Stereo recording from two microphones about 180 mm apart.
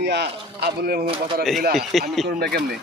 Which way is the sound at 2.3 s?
60° right (ahead or behind).